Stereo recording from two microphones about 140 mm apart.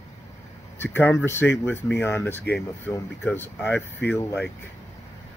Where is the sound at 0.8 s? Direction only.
15° left (ahead or behind).